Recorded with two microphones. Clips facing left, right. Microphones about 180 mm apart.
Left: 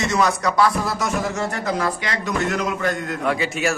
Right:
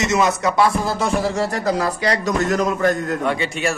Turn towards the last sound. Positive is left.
turn(degrees=0)  # may be behind; listen again after turning